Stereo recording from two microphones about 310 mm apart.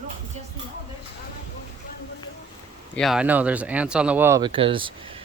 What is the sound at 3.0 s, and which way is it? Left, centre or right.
Speech, centre.